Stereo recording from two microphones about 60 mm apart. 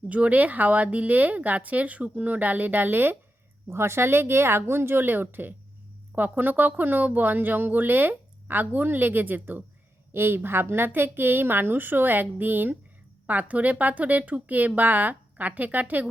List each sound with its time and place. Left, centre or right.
0.1 s speech: right
3.7 s speech: right